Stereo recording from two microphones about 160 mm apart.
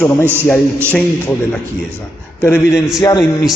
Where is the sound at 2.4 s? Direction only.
15° left (ahead or behind).